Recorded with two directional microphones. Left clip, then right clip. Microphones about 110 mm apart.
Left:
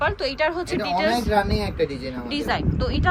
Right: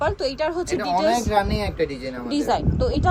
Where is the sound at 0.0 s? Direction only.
35° right (ahead or behind).